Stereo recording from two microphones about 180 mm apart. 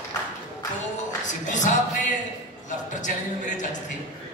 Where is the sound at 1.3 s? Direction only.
45° left (ahead or behind).